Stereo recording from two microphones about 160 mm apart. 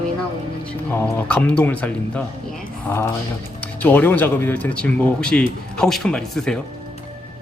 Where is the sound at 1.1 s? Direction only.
10° left (ahead or behind).